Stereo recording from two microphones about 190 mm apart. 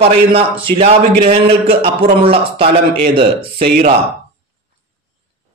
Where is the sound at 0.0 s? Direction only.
30° right (ahead or behind).